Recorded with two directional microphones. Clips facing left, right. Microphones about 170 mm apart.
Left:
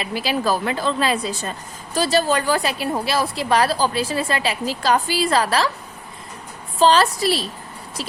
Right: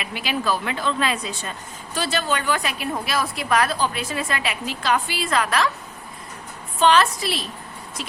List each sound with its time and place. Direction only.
0.0 s speech: 35° left (ahead or behind)
6.7 s speech: 35° left (ahead or behind)